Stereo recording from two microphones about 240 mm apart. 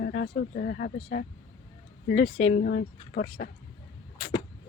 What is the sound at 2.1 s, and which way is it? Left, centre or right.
Speech, left.